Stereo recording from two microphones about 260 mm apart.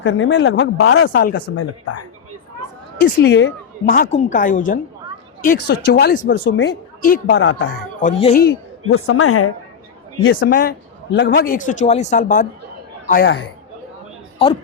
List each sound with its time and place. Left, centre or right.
0.0 s speech: left
1.5 s a woman's voice: left
3.0 s a man's voice: left
8.0 s a man's voice: left
8.9 s a woman's voice: left
10.2 s a man's voice: left